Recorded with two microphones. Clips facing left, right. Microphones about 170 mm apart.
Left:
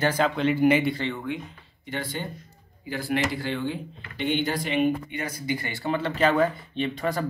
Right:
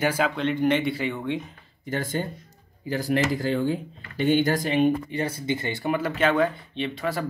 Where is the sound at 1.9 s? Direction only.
45° right (ahead or behind).